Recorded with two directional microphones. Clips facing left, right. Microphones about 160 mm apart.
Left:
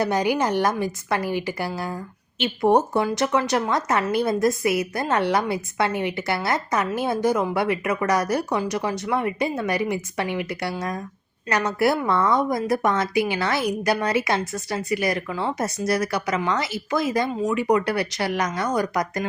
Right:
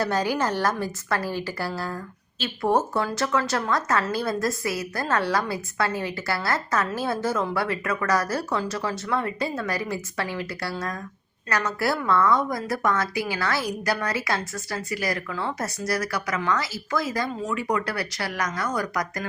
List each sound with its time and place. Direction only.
0.0 s a woman's voice: 15° left (ahead or behind)